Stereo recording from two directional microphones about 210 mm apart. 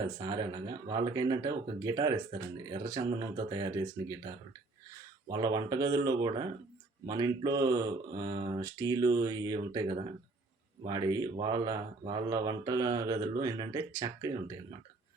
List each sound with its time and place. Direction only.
0.2 s speech: 20° right (ahead or behind)